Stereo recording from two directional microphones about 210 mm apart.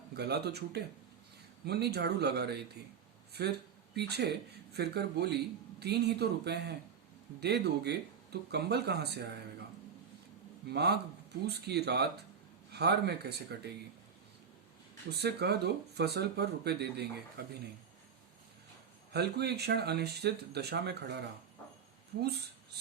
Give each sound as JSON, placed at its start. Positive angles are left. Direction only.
{"t": 0.1, "sound": "speech", "side_deg": -50}
{"t": 3.9, "sound": "speech", "side_deg": -50}
{"t": 10.7, "sound": "speech", "side_deg": -50}
{"t": 15.1, "sound": "speech", "side_deg": -50}
{"t": 19.1, "sound": "speech", "side_deg": -50}